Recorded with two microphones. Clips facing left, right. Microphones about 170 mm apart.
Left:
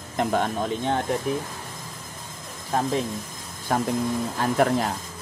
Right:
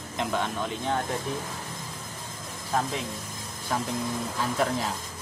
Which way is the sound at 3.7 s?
55° left (ahead or behind).